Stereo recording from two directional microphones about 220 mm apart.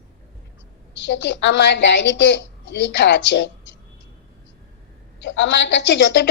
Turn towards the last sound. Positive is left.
turn(degrees=55)  # may be behind; listen again after turning